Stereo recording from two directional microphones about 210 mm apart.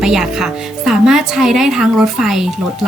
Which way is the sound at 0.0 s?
Centre (ahead or behind).